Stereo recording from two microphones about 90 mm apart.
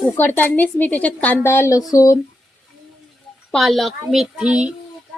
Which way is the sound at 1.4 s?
30° left (ahead or behind).